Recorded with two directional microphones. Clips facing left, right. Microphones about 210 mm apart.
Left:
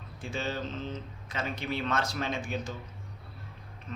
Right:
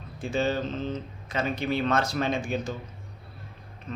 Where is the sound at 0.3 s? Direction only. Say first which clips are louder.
Right 7 dB; 35° right (ahead or behind).